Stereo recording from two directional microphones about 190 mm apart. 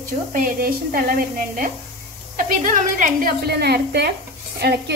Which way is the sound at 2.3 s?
45° right (ahead or behind).